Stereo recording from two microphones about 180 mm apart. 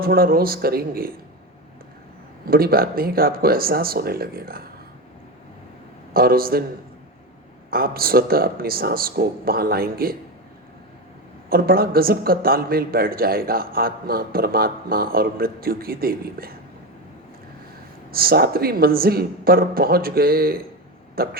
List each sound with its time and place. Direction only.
0.0 s a woman's voice: 55° right (ahead or behind)
2.5 s a woman's voice: 55° right (ahead or behind)
6.1 s a woman's voice: 55° right (ahead or behind)
7.7 s a woman's voice: 55° right (ahead or behind)
11.4 s a woman's voice: 55° right (ahead or behind)
18.1 s a woman's voice: 55° right (ahead or behind)